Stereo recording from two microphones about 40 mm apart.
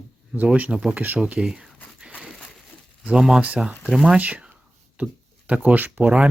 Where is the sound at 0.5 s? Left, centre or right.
Right.